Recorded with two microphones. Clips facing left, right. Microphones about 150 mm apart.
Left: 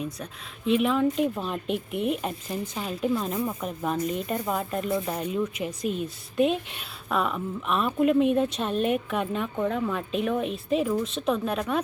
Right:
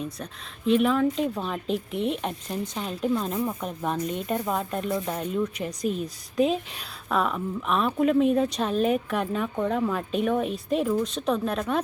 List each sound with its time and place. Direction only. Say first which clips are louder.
0.0 s a woman's voice: even; 5° left (ahead or behind)